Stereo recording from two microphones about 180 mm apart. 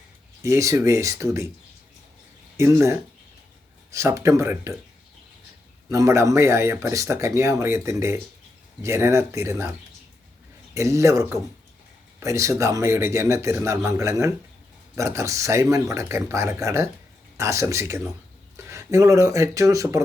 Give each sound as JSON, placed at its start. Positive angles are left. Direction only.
{"t": 0.4, "sound": "speech", "side_deg": -15}
{"t": 2.6, "sound": "speech", "side_deg": -15}
{"t": 5.9, "sound": "speech", "side_deg": -15}
{"t": 10.8, "sound": "speech", "side_deg": -15}